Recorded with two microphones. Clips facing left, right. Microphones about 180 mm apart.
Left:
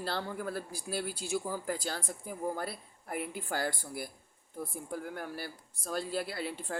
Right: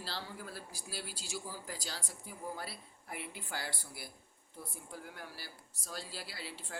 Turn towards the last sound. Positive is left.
turn(degrees=55)  # may be behind; listen again after turning